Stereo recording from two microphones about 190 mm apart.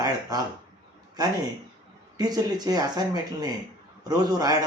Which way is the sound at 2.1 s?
20° right (ahead or behind).